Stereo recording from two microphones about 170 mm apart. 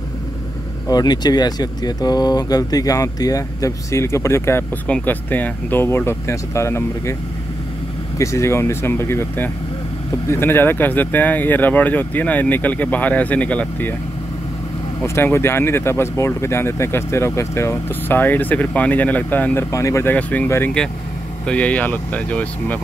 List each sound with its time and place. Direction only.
0.8 s speech: 25° left (ahead or behind)
8.2 s speech: 15° left (ahead or behind)
15.0 s speech: 15° left (ahead or behind)